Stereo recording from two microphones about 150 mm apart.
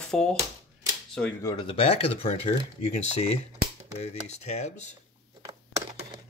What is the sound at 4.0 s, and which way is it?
Speech, 45° left (ahead or behind).